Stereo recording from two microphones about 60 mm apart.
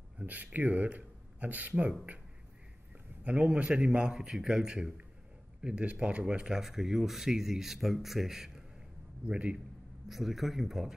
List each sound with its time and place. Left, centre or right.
0.2 s speech: right
3.3 s a man's voice: right
6.4 s speech: centre
9.3 s a man's voice: centre
10.0 s speech: centre